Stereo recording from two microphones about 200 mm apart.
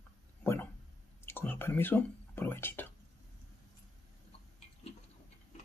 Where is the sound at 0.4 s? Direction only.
10° left (ahead or behind).